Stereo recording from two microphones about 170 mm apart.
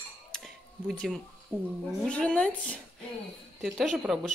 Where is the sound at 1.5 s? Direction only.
15° right (ahead or behind).